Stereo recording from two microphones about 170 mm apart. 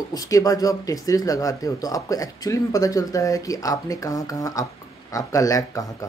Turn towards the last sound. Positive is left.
turn(degrees=20)  # may be behind; listen again after turning